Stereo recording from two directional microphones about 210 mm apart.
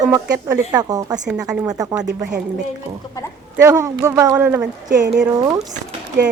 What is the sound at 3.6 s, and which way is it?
A man's voice, 15° right (ahead or behind).